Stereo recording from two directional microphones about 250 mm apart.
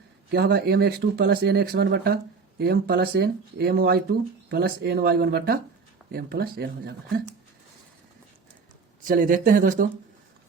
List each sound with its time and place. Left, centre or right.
0.3 s speech: right
9.0 s speech: right